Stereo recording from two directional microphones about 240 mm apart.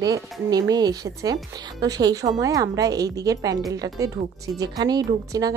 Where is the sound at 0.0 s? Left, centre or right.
Centre.